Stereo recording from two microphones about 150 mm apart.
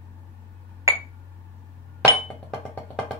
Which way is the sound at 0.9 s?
20° right (ahead or behind).